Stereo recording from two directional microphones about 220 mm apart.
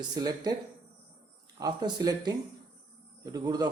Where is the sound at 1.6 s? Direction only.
15° right (ahead or behind).